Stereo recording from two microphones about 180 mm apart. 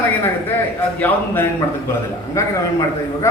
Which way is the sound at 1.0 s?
10° left (ahead or behind).